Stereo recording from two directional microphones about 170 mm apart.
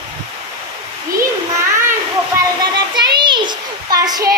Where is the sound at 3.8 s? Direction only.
25° right (ahead or behind).